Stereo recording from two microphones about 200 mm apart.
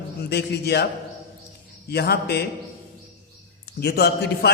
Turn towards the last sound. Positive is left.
turn(degrees=55)  # may be behind; listen again after turning